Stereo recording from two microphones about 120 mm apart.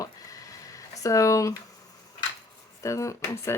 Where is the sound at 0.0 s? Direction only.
30° left (ahead or behind).